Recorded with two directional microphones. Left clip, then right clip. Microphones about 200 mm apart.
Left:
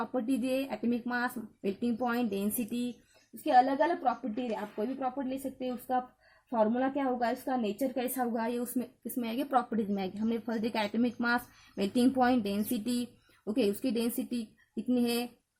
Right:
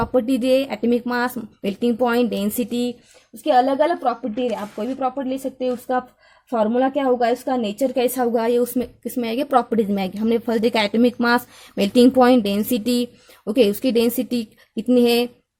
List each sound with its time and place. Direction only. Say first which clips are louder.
0.0 s a woman's voice: right 13 dB; 40° right (ahead or behind)